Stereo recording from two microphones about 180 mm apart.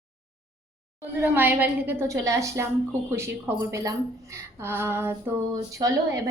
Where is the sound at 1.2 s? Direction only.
10° right (ahead or behind).